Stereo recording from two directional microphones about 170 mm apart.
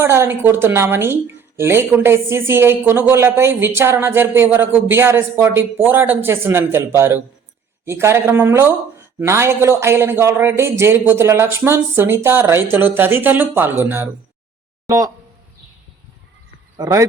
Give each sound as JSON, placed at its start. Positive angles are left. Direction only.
{"t": 0.0, "sound": "speech", "side_deg": -15}
{"t": 16.7, "sound": "speech", "side_deg": -20}